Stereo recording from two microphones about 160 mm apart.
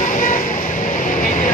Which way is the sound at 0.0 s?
55° left (ahead or behind).